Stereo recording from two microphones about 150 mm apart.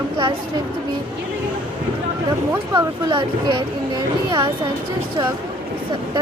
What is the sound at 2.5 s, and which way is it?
Speech, 35° right (ahead or behind).